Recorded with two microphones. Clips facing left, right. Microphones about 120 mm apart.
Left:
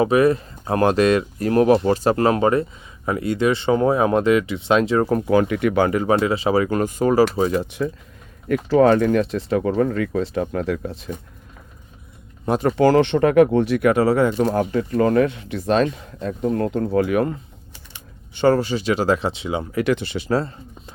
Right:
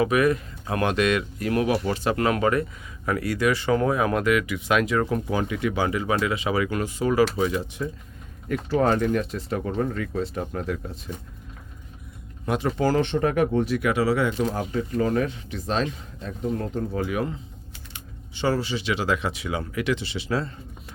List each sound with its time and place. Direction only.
0.0 s speech: 30° left (ahead or behind)
5.3 s speech: 60° left (ahead or behind)
6.1 s speech: 30° left (ahead or behind)
7.5 s speech: 65° left (ahead or behind)
8.7 s speech: 85° left
12.6 s speech: 70° left (ahead or behind); by 14.3 s 45° left (ahead or behind)
14.3 s speech: 60° left (ahead or behind)
18.3 s speech: 55° left (ahead or behind); by 19.6 s 25° left (ahead or behind)
19.7 s speech: 50° left (ahead or behind)